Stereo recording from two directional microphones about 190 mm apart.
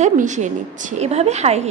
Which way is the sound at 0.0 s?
40° right (ahead or behind).